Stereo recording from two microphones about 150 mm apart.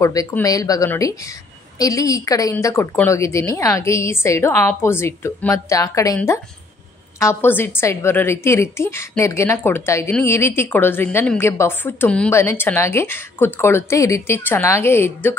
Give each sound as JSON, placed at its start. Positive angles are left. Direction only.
{"t": 0.0, "sound": "a woman's voice", "side_deg": 25}
{"t": 7.2, "sound": "a woman's voice", "side_deg": 15}